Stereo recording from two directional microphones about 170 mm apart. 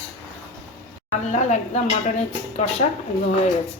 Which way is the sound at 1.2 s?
45° left (ahead or behind).